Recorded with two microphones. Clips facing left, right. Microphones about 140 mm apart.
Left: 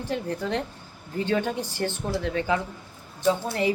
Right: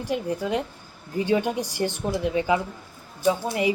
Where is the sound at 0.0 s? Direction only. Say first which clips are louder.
Right 2 dB; 10° right (ahead or behind).